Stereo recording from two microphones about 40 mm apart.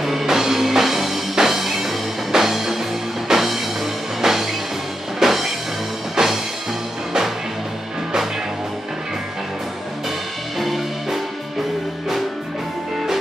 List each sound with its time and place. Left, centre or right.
0.0 s music: centre
10.6 s music: centre